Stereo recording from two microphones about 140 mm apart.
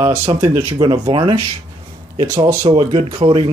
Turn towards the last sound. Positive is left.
turn(degrees=-40)  # may be behind; listen again after turning